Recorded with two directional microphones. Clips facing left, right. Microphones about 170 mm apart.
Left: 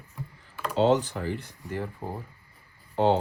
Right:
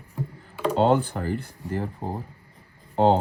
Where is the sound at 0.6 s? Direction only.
50° right (ahead or behind).